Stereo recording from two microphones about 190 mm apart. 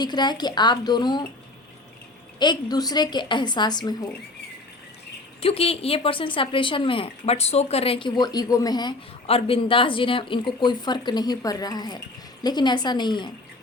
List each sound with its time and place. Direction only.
0.0 s a woman's voice: 20° left (ahead or behind)
2.4 s a woman's voice: 20° left (ahead or behind)
5.4 s a woman's voice: 30° left (ahead or behind)